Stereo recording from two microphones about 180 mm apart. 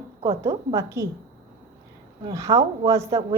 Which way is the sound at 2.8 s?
15° right (ahead or behind).